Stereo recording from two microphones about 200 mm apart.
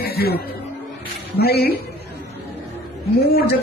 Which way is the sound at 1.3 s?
50° left (ahead or behind).